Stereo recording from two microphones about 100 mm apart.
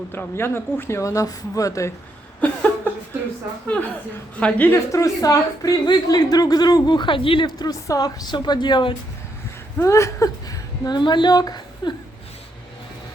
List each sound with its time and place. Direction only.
0.1 s speech: 25° left (ahead or behind)
2.4 s a sound: 15° left (ahead or behind)
4.4 s a woman's voice: 15° left (ahead or behind)
4.9 s speech: 35° left (ahead or behind); by 9.0 s 55° left (ahead or behind)
9.7 s a woman's voice: 30° left (ahead or behind)